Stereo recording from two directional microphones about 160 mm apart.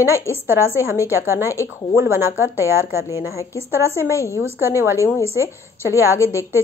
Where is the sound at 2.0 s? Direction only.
15° right (ahead or behind).